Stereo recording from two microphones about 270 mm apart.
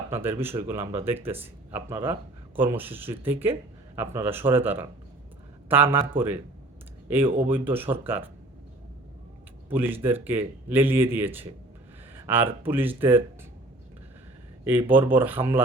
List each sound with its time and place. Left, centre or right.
0.1 s a man's voice: centre
0.8 s speech: centre
1.0 s a man's voice: centre
6.1 s a man's voice: centre
9.6 s a man's voice: centre
14.6 s a man's voice: centre